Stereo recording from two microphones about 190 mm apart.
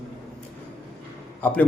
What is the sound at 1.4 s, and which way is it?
Speech, 10° left (ahead or behind).